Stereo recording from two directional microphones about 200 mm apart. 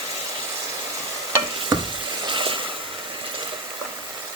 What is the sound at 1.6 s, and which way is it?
Sizzle, 20° right (ahead or behind).